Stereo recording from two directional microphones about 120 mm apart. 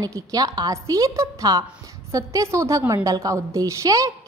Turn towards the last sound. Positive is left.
turn(degrees=-25)  # may be behind; listen again after turning